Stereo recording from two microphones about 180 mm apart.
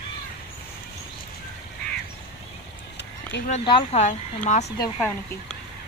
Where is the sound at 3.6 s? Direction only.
25° left (ahead or behind).